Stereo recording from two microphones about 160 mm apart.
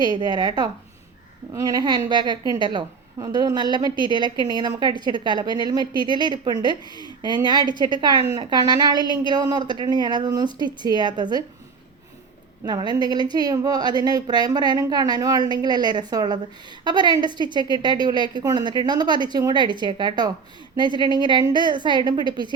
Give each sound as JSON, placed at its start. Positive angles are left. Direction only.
{"t": 0.0, "sound": "a woman's voice", "side_deg": -25}
{"t": 12.6, "sound": "a woman's voice", "side_deg": -25}